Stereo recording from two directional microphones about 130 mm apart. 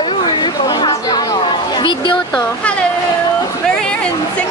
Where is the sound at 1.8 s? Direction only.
35° left (ahead or behind).